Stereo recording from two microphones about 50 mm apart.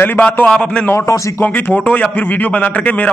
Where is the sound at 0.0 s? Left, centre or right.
Left.